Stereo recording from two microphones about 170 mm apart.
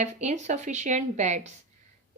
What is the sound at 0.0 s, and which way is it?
A woman's voice, 45° right (ahead or behind).